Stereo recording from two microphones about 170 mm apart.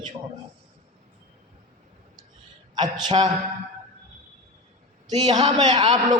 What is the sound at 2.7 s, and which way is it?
Speech, 25° right (ahead or behind).